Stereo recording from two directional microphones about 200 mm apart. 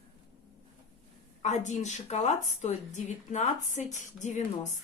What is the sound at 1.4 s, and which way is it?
A woman's voice, 35° left (ahead or behind).